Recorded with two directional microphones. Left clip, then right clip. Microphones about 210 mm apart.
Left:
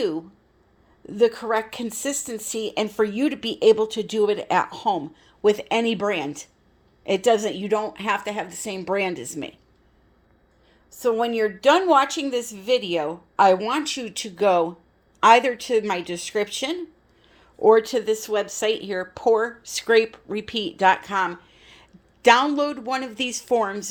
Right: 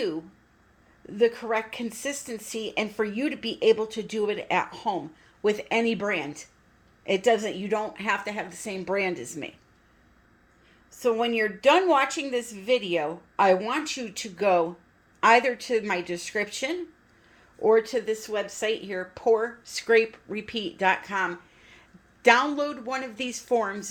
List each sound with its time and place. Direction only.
1.0 s a woman's voice: 30° left (ahead or behind)
11.0 s a woman's voice: 25° left (ahead or behind)
17.3 s speech: 35° left (ahead or behind)